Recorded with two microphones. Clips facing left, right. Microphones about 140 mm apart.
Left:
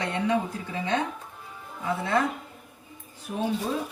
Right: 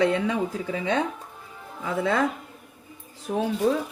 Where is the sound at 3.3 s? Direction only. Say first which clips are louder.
Right 5 dB; 90° right.